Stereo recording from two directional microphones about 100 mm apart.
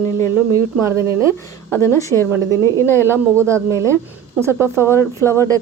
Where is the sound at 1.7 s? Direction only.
25° left (ahead or behind).